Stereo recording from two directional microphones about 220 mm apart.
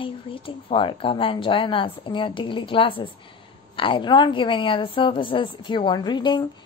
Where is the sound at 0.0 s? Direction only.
25° left (ahead or behind).